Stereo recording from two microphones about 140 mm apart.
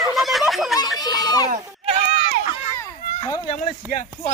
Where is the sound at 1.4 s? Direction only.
45° right (ahead or behind).